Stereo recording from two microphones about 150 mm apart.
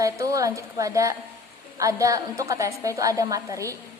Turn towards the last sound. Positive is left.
turn(degrees=-20)  # may be behind; listen again after turning